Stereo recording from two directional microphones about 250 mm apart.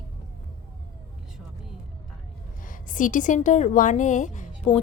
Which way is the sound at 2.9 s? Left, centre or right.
Left.